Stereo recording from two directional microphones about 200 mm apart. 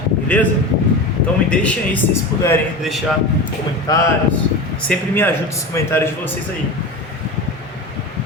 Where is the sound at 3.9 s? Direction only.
20° left (ahead or behind).